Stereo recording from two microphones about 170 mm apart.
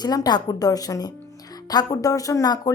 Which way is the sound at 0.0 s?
25° left (ahead or behind).